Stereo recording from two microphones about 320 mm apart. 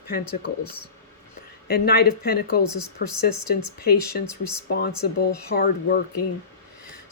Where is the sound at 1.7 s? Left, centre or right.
Left.